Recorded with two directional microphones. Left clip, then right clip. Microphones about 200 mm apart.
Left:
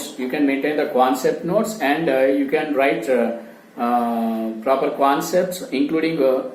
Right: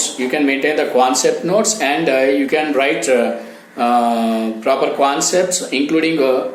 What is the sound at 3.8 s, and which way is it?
Mantra, 35° right (ahead or behind).